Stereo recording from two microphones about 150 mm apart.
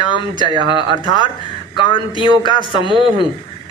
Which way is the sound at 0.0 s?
30° left (ahead or behind).